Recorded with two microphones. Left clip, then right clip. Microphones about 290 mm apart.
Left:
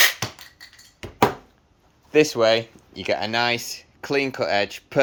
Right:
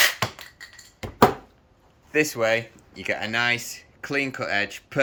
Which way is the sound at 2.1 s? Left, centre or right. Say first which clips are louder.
Left 4 dB; left.